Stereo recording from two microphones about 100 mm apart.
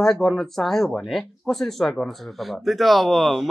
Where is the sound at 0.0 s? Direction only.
5° left (ahead or behind).